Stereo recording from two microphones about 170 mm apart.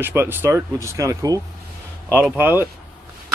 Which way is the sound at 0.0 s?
15° right (ahead or behind).